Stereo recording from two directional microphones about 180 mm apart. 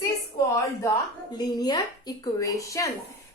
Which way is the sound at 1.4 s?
20° left (ahead or behind).